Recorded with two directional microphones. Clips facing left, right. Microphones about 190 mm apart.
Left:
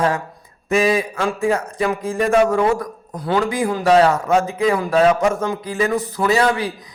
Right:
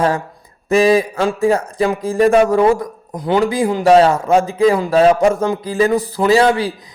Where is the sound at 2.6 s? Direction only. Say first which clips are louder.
Right 5 dB; 20° right (ahead or behind).